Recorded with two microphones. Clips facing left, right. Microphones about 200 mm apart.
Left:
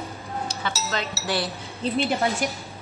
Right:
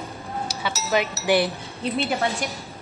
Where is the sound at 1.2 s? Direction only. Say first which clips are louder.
Right 7 dB; 15° right (ahead or behind).